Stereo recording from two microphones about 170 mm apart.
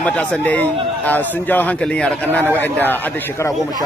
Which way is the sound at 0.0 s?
10° left (ahead or behind).